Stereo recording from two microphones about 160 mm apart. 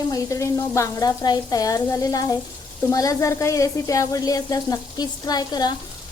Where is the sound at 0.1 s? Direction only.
20° left (ahead or behind).